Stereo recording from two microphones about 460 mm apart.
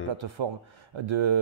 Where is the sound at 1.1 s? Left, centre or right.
Right.